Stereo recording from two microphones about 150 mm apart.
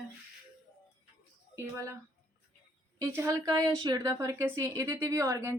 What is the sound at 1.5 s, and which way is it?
Speech, 20° right (ahead or behind).